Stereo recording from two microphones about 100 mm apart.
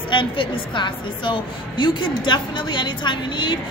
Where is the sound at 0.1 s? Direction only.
55° left (ahead or behind).